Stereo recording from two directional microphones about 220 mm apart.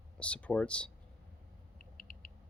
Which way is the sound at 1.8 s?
40° left (ahead or behind).